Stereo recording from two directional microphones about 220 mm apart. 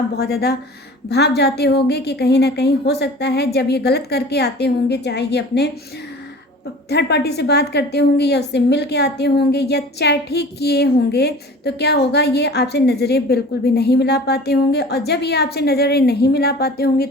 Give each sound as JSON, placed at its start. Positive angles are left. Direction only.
{"t": 0.2, "sound": "a woman's voice", "side_deg": 45}
{"t": 6.9, "sound": "a woman's voice", "side_deg": 50}